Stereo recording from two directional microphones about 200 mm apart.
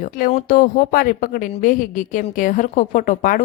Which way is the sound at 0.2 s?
40° left (ahead or behind).